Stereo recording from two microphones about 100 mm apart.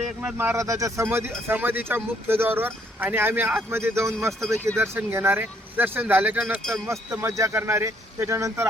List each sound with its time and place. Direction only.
0.2 s speech: 20° right (ahead or behind)
1.5 s speech: 20° right (ahead or behind)
4.3 s speech: 5° left (ahead or behind)
4.8 s speech: 25° right (ahead or behind)
7.1 s speech: 30° right (ahead or behind)